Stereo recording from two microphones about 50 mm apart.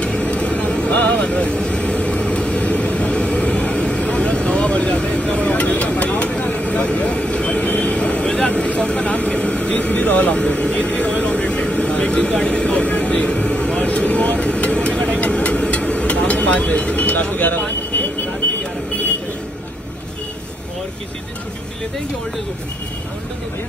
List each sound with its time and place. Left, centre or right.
0.0 s vehicle: left